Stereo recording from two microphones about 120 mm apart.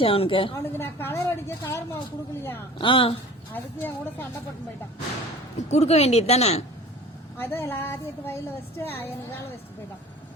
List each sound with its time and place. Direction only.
0.0 s a woman's voice: 50° left (ahead or behind)
0.5 s a woman's voice: 20° left (ahead or behind)
2.7 s a woman's voice: 45° left (ahead or behind)
3.5 s speech: 15° left (ahead or behind)
5.7 s speech: 70° left (ahead or behind)
7.3 s a woman's voice: 20° left (ahead or behind)